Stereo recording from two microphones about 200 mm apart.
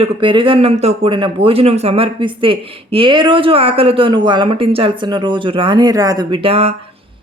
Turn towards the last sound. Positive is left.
turn(degrees=-30)  # may be behind; listen again after turning